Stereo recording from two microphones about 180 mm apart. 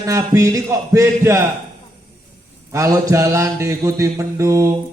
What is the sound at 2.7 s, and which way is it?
A man's voice, 15° right (ahead or behind).